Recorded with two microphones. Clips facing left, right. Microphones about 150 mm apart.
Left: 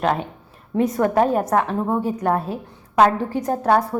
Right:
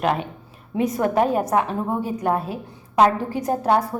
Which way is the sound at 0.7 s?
5° right (ahead or behind).